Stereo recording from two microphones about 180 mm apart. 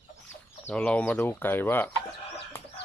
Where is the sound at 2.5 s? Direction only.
15° left (ahead or behind).